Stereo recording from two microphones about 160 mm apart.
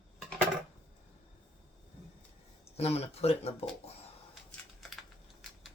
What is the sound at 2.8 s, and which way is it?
Speech, 40° left (ahead or behind).